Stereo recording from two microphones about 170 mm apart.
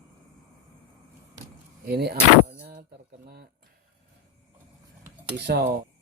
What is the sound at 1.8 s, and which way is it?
Speech, 70° right (ahead or behind).